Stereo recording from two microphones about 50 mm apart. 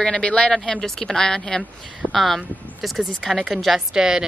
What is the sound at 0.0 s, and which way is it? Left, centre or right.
A woman's voice, centre.